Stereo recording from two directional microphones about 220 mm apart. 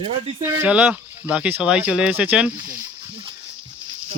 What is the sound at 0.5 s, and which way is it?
Speech, 5° right (ahead or behind).